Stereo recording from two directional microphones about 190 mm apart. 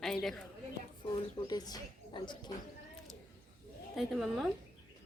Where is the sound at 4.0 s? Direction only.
Centre (ahead or behind).